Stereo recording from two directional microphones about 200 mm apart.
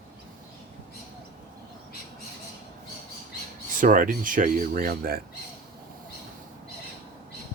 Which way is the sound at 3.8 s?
40° right (ahead or behind).